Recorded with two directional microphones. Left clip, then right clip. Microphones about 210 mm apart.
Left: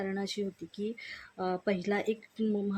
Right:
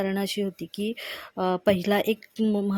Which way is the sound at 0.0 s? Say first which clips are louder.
Right 7 dB; 40° right (ahead or behind).